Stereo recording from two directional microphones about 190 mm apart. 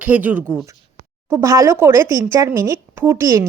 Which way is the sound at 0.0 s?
10° right (ahead or behind).